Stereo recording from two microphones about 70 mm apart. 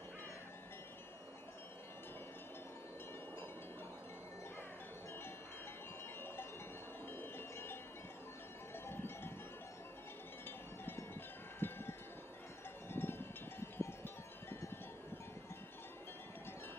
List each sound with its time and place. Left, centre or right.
7.1 s wind chime: left
8.7 s a sound: left
10.9 s wind chime: left
12.8 s music: left